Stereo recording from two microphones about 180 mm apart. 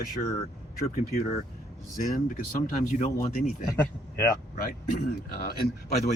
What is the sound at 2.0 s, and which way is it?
Speech, 45° left (ahead or behind).